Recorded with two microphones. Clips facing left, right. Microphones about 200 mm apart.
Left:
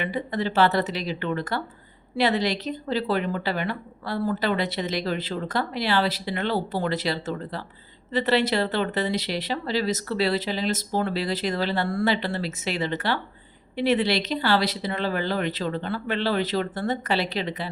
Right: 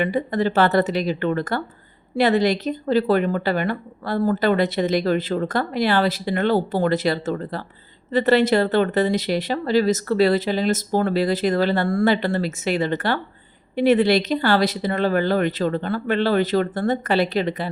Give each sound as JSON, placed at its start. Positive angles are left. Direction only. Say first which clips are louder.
{"t": 0.0, "sound": "speech", "louder": "right 6 dB", "side_deg": -50}